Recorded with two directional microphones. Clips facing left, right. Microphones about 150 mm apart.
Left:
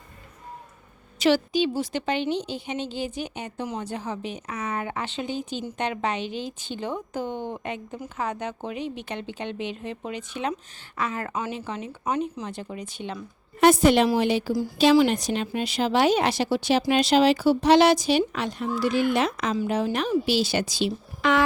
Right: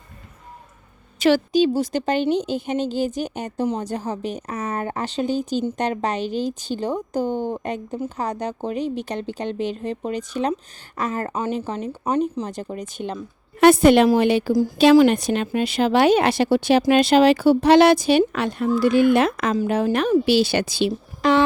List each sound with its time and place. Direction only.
1.2 s a woman's voice: 45° right (ahead or behind)
13.6 s a woman's voice: 65° right (ahead or behind)
21.2 s speech: 35° right (ahead or behind)